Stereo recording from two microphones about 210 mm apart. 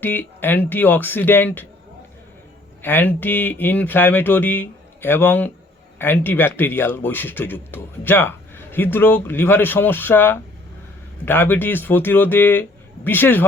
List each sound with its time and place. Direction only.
0.0 s speech: 10° left (ahead or behind)
2.8 s speech: 10° left (ahead or behind)